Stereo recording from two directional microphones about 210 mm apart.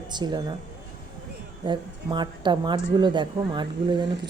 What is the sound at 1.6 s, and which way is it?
A woman's voice, 20° right (ahead or behind).